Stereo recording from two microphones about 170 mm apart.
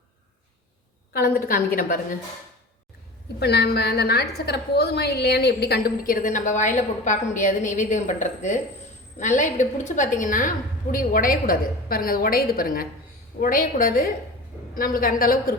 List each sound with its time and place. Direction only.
1.1 s a woman's voice: 65° left (ahead or behind)
3.4 s a woman's voice: 75° left (ahead or behind); by 15.5 s 55° left (ahead or behind)